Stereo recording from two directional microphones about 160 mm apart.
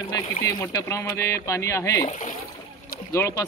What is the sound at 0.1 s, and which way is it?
Speech, 15° left (ahead or behind).